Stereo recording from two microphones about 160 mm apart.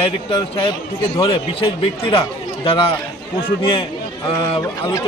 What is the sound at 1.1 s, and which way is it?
Speech, 35° left (ahead or behind).